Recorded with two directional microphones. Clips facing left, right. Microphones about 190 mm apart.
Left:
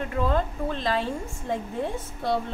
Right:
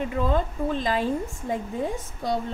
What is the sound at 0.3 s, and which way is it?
Speech, 15° right (ahead or behind).